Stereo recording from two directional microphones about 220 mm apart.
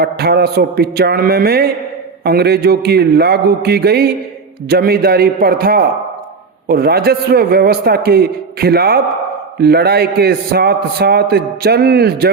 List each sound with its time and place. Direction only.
0.0 s a man's voice: 45° right (ahead or behind)